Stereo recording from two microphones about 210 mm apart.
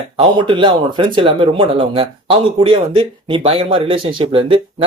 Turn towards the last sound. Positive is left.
turn(degrees=-25)  # may be behind; listen again after turning